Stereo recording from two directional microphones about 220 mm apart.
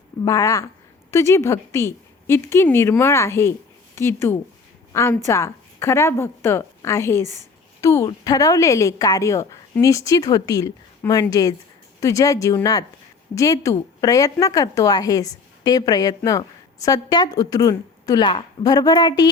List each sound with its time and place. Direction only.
0.3 s a woman's voice: 15° left (ahead or behind)